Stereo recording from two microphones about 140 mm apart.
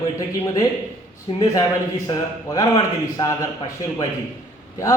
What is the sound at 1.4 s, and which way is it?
A man's voice, 25° left (ahead or behind).